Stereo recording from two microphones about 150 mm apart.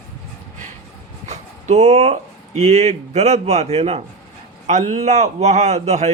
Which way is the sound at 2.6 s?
50° right (ahead or behind).